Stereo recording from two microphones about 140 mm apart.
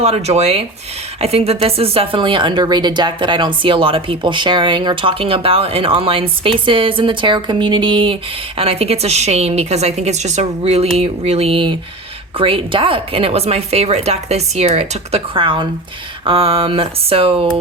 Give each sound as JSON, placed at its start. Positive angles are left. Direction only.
{"t": 0.0, "sound": "speech", "side_deg": -45}